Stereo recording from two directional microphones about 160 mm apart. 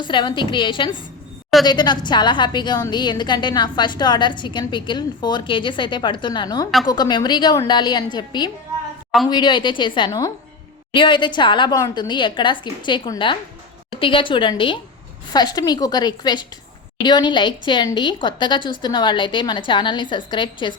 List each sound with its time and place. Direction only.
0.0 s a woman's voice: 30° left (ahead or behind)